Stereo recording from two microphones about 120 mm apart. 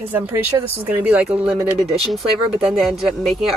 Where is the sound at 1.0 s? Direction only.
5° right (ahead or behind).